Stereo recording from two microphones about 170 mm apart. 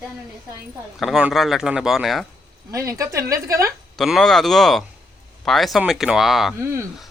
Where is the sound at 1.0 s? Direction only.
Centre (ahead or behind).